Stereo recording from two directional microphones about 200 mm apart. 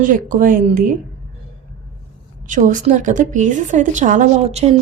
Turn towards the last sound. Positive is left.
turn(degrees=-40)  # may be behind; listen again after turning